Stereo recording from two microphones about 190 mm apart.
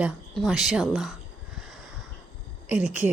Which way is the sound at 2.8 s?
5° right (ahead or behind).